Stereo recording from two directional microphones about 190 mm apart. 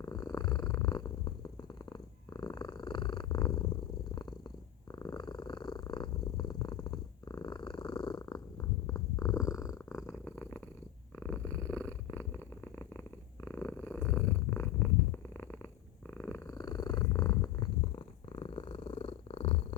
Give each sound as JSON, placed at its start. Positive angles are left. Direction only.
{"t": 0.0, "sound": "purr", "side_deg": 20}